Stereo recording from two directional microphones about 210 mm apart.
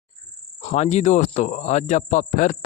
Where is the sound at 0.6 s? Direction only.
35° left (ahead or behind).